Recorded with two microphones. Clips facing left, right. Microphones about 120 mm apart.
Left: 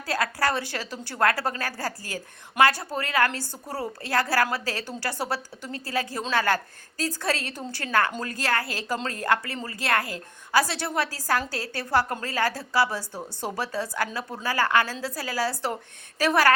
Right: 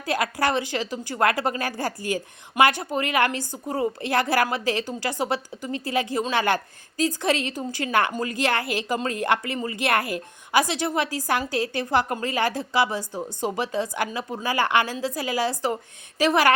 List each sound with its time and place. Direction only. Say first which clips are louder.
0.0 s a woman's voice: right 2 dB; 20° right (ahead or behind)